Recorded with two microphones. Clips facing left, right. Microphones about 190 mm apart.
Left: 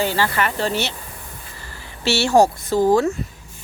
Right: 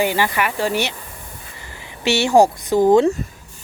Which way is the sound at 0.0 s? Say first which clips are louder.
Right 1 dB; 15° right (ahead or behind).